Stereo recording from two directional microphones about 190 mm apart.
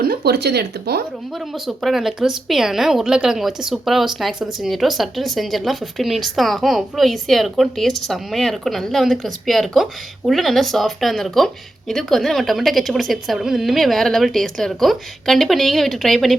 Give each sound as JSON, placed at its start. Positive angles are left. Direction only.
{"t": 0.0, "sound": "speech", "side_deg": -55}
{"t": 1.4, "sound": "a woman's voice", "side_deg": 0}